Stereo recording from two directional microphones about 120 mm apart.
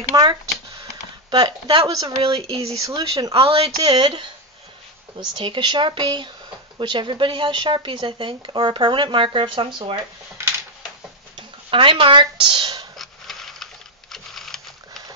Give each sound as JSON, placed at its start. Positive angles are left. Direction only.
{"t": 0.1, "sound": "a sound", "side_deg": -35}
{"t": 1.3, "sound": "speech", "side_deg": -35}
{"t": 2.2, "sound": "speech", "side_deg": -50}
{"t": 2.8, "sound": "speech", "side_deg": -30}
{"t": 3.3, "sound": "speech", "side_deg": -50}
{"t": 5.3, "sound": "speech", "side_deg": -40}
{"t": 10.4, "sound": "a sound", "side_deg": -20}
{"t": 11.3, "sound": "speech", "side_deg": -45}
{"t": 12.9, "sound": "a sound", "side_deg": 0}
{"t": 14.1, "sound": "typing", "side_deg": 0}